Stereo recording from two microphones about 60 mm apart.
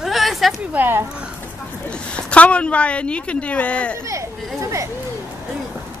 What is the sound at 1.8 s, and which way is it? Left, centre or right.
A woman's voice, centre.